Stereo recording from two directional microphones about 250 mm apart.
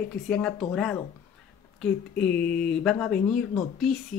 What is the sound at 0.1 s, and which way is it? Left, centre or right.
Speech, centre.